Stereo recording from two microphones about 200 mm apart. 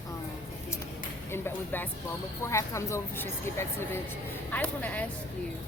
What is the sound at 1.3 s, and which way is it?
A woman's voice, 10° left (ahead or behind).